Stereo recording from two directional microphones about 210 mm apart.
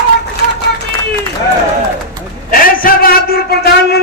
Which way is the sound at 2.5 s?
40° left (ahead or behind).